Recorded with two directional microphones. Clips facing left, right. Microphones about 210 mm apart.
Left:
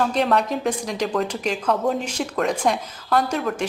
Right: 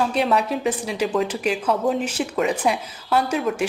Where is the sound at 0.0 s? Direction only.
5° right (ahead or behind).